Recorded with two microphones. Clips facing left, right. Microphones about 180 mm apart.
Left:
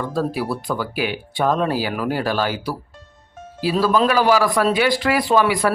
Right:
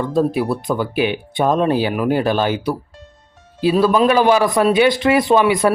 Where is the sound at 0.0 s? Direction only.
20° right (ahead or behind).